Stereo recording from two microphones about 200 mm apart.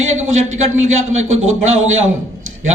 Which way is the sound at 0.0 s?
80° right.